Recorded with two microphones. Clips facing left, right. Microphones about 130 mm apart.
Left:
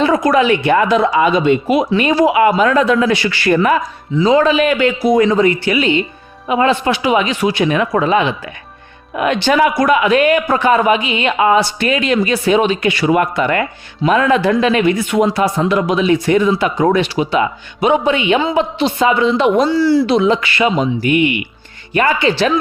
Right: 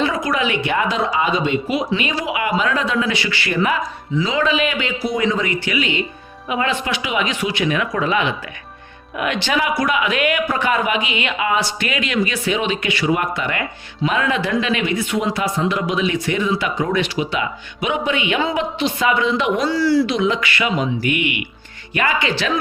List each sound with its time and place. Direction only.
0.0 s speech: 45° left (ahead or behind); by 20.1 s 20° left (ahead or behind)
20.1 s speech: 35° left (ahead or behind)